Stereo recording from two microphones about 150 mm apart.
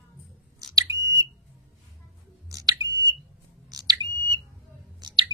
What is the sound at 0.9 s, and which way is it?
Smoke detector, 20° right (ahead or behind).